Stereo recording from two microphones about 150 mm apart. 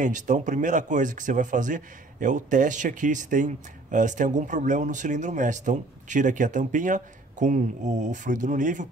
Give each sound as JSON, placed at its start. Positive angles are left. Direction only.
{"t": 0.0, "sound": "speech", "side_deg": -60}